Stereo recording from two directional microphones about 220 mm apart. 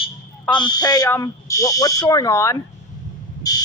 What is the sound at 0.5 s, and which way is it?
Speech, 20° left (ahead or behind).